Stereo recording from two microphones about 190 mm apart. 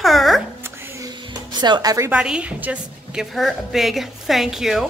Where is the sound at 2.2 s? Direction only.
5° right (ahead or behind).